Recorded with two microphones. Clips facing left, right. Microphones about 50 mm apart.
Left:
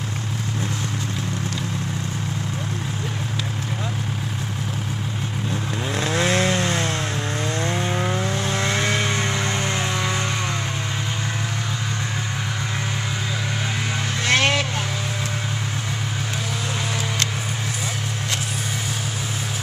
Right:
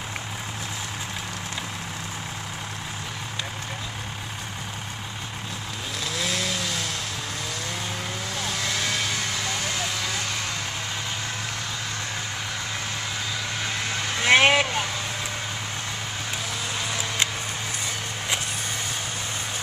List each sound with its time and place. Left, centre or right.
5.9 s chainsaw: left
7.6 s vehicle: left
14.2 s vehicle: centre